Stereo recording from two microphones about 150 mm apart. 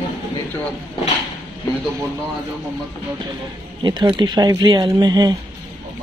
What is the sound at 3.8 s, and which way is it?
Speech, 30° right (ahead or behind).